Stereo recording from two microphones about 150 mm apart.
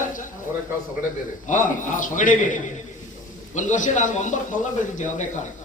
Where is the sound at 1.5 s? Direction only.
60° left (ahead or behind).